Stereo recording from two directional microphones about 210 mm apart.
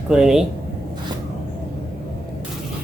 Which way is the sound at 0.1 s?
Centre (ahead or behind).